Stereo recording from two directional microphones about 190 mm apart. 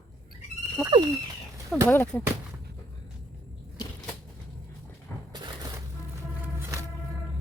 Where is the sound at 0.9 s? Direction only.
25° right (ahead or behind).